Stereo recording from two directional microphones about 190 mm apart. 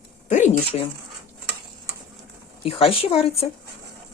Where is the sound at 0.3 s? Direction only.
40° left (ahead or behind).